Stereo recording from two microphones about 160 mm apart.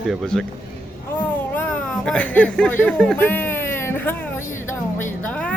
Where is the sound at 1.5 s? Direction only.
5° left (ahead or behind).